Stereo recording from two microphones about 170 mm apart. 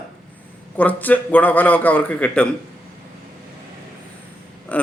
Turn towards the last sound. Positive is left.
turn(degrees=10)  # may be behind; listen again after turning